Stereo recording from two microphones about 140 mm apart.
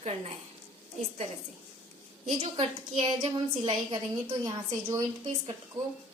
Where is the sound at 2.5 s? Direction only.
35° right (ahead or behind).